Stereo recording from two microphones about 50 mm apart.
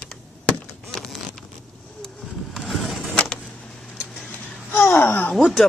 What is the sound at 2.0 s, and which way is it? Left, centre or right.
Vehicle, centre.